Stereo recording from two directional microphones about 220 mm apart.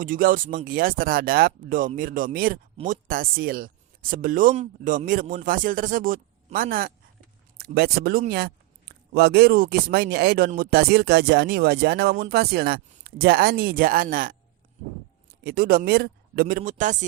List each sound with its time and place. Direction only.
0.0 s speech: 40° right (ahead or behind)
15.4 s speech: 45° right (ahead or behind)